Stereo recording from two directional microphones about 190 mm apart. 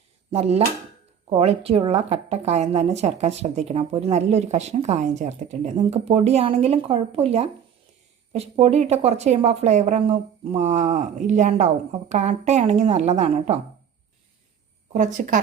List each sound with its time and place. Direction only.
0.3 s speech: 35° right (ahead or behind)
14.9 s speech: 40° right (ahead or behind)